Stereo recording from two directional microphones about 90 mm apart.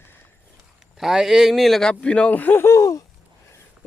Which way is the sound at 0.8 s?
5° right (ahead or behind).